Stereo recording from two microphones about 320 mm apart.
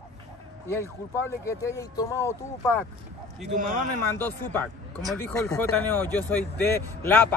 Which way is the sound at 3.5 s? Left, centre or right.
Right.